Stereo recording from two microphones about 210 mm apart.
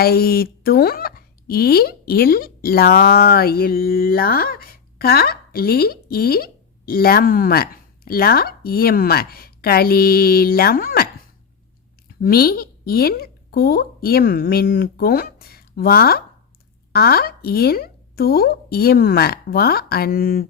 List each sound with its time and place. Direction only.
0.0 s speech: 45° left (ahead or behind)
12.2 s speech: 45° left (ahead or behind)